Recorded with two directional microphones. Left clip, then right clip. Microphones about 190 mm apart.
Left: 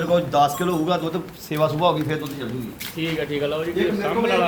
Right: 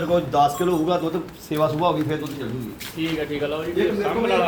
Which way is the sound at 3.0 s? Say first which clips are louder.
Left 1 dB; 55° left (ahead or behind).